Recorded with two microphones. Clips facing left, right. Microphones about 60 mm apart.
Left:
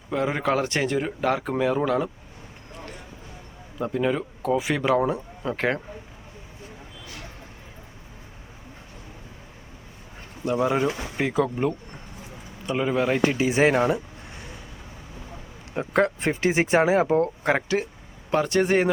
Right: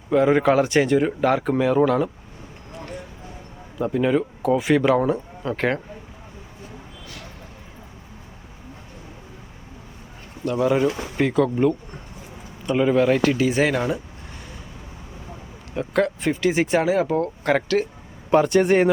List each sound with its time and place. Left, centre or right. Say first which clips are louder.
0.1 s speech: right 7 dB; centre
3.8 s speech: right 4 dB; centre
10.4 s speech: right 3 dB; centre
13.2 s speech: right 1 dB; left
15.7 s speech: right 1 dB; left
17.4 s speech: right 3 dB; centre
18.3 s speech: right 5 dB; centre